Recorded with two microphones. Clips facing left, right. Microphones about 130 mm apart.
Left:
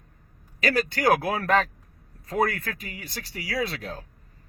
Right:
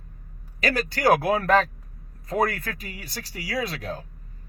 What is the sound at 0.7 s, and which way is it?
Speech, 30° right (ahead or behind).